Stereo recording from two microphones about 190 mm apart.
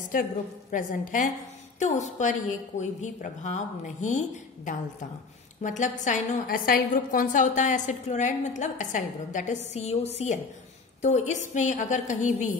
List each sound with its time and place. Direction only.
0.1 s a woman's voice: 45° left (ahead or behind)
5.6 s a woman's voice: 40° left (ahead or behind)